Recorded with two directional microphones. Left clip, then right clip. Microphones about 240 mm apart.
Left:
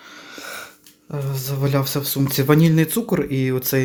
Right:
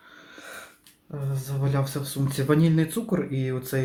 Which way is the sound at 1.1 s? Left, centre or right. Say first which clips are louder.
Left 8 dB; left.